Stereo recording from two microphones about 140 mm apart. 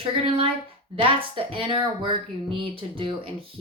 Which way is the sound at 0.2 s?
40° right (ahead or behind).